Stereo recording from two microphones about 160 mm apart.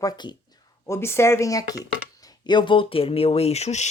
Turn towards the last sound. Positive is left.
turn(degrees=45)  # may be behind; listen again after turning